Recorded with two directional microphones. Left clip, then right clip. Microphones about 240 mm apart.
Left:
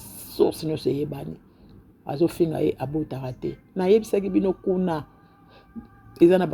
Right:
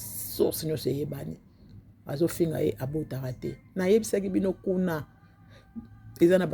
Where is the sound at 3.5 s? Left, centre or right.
Right.